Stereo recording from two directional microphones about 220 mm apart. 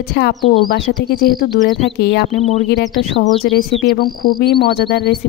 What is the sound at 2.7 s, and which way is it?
Speech, 50° left (ahead or behind).